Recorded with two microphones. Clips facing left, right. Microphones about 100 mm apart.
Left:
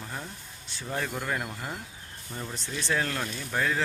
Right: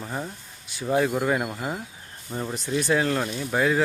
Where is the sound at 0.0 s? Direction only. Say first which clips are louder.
Right 7 dB; 15° right (ahead or behind).